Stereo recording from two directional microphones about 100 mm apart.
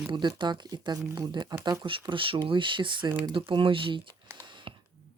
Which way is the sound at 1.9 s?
60° right (ahead or behind).